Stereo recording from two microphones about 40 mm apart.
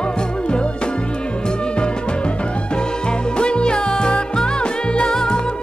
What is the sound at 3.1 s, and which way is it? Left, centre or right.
Music, left.